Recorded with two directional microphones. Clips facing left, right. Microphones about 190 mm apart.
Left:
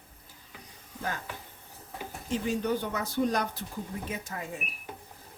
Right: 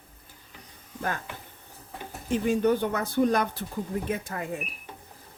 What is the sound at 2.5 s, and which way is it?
Speech, 55° right (ahead or behind).